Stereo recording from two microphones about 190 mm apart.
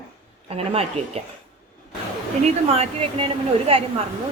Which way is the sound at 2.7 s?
30° right (ahead or behind).